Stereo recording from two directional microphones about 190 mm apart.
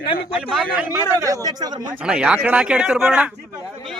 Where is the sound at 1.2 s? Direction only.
15° right (ahead or behind).